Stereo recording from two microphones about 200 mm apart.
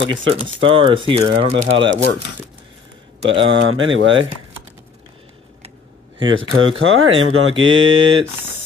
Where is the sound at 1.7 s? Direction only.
70° right (ahead or behind).